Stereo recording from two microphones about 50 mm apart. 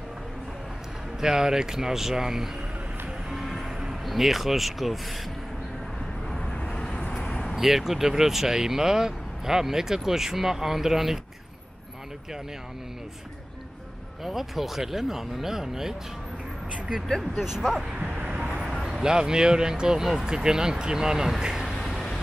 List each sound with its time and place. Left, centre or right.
1.2 s speech: centre
3.3 s music: centre
6.3 s vehicle: centre
7.5 s speech: centre
14.2 s speech: centre
17.2 s speech: centre
18.0 s speech: right
18.3 s vehicle: centre
18.6 s speech: centre
21.8 s vehicle: centre